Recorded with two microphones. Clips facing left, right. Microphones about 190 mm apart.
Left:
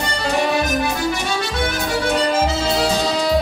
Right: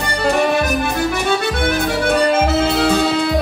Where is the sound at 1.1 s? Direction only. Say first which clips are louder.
Right 4 dB; 55° right (ahead or behind).